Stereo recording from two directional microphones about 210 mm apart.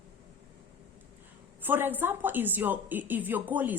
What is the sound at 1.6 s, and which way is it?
A woman's voice, 10° right (ahead or behind).